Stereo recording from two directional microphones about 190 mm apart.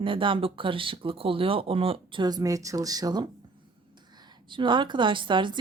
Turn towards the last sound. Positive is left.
turn(degrees=-25)  # may be behind; listen again after turning